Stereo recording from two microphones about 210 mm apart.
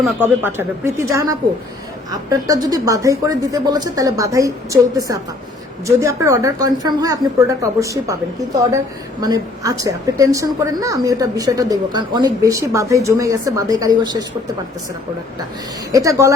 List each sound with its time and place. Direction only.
0.4 s a woman's voice: 10° right (ahead or behind)
9.2 s a woman's voice: 15° right (ahead or behind)
15.9 s a woman's voice: 15° right (ahead or behind)